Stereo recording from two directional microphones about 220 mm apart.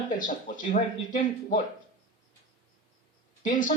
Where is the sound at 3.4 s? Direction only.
35° left (ahead or behind).